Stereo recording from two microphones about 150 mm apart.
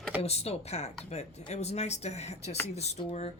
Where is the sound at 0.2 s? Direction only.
45° left (ahead or behind).